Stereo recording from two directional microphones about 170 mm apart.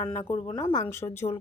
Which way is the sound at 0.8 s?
15° left (ahead or behind).